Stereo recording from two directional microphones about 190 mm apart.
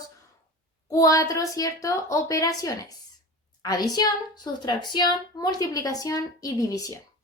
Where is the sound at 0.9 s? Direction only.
15° left (ahead or behind).